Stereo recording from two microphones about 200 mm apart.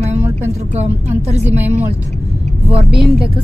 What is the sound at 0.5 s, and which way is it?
A woman's voice, 35° right (ahead or behind).